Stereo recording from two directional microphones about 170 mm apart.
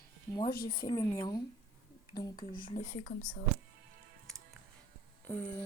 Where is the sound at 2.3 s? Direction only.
55° left (ahead or behind).